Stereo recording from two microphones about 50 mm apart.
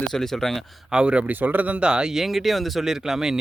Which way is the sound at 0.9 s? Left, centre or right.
Right.